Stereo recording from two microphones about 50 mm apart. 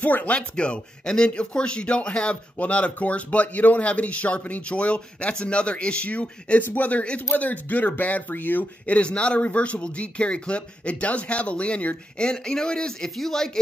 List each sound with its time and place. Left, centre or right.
0.0 s speech: left
0.4 s a man's voice: centre